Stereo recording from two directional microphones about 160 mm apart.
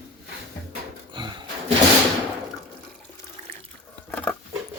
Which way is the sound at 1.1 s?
30° right (ahead or behind).